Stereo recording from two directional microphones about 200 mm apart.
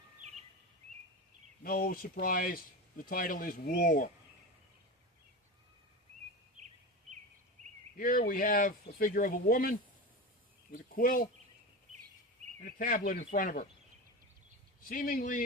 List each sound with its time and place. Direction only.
1.6 s speech: 45° left (ahead or behind)
7.9 s speech: 45° left (ahead or behind)
12.6 s speech: 50° left (ahead or behind)
14.8 s speech: 40° left (ahead or behind)